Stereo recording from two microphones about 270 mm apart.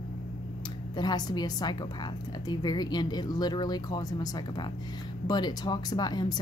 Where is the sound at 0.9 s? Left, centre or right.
Centre.